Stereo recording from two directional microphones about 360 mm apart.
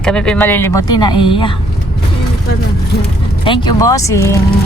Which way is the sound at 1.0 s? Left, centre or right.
Left.